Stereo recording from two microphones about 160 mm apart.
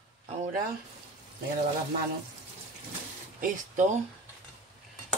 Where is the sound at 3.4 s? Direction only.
55° right (ahead or behind).